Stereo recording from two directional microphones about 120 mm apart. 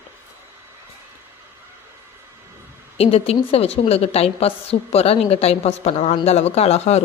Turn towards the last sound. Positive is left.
turn(degrees=60)  # may be behind; listen again after turning